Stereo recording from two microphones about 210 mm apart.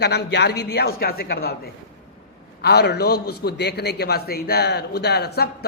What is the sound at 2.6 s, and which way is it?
A man's voice, 50° left (ahead or behind).